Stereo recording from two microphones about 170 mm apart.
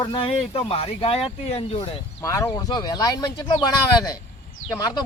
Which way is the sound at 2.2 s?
15° left (ahead or behind).